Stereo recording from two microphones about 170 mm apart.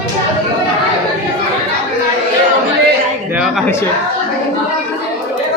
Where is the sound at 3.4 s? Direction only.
Centre (ahead or behind).